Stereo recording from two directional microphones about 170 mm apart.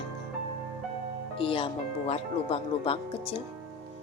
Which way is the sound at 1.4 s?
30° left (ahead or behind).